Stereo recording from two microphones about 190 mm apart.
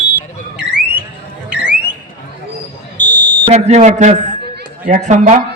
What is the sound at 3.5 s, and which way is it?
A man's voice, 35° right (ahead or behind).